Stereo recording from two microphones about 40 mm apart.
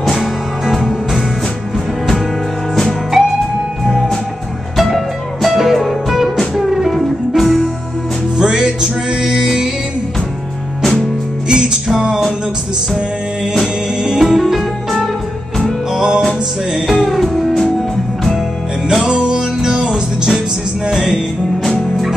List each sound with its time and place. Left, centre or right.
0.0 s music: centre
3.1 s music: centre
3.8 s music: centre
4.7 s music: centre
8.4 s music: centre
10.8 s music: centre
11.4 s music: right
14.2 s music: centre
15.9 s music: centre
16.7 s music: centre
19.0 s music: centre